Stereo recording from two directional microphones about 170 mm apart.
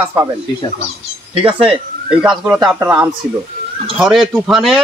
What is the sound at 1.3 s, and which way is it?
Speech, 35° right (ahead or behind).